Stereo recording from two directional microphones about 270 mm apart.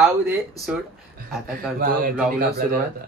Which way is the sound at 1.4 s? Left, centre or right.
Right.